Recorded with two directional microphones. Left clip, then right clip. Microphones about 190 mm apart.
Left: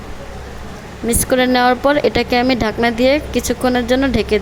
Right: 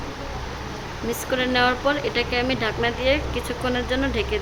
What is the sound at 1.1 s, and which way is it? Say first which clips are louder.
Speech: left 9 dB; 35° left (ahead or behind).